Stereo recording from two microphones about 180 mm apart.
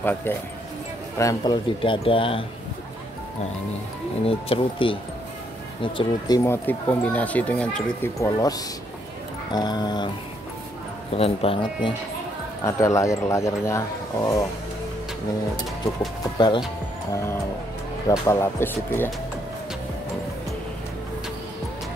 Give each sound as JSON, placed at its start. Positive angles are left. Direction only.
{"t": 0.0, "sound": "a man's voice", "side_deg": 10}
{"t": 4.3, "sound": "speech", "side_deg": 30}
{"t": 8.2, "sound": "a man's voice", "side_deg": 20}
{"t": 11.1, "sound": "speech", "side_deg": 30}
{"t": 12.6, "sound": "speech", "side_deg": 15}
{"t": 16.3, "sound": "a man's voice", "side_deg": 25}